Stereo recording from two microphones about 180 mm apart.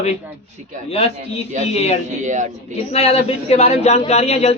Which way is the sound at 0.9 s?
35° left (ahead or behind).